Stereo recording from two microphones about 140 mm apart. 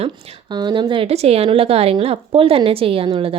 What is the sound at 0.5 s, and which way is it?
A woman's voice, 30° right (ahead or behind).